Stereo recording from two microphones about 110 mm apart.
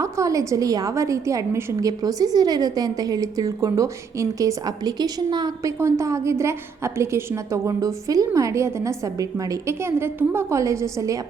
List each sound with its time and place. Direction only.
0.0 s a woman's voice: 30° right (ahead or behind)
5.8 s a woman's voice: 25° right (ahead or behind)